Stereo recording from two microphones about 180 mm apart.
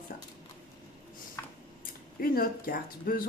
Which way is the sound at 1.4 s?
15° left (ahead or behind).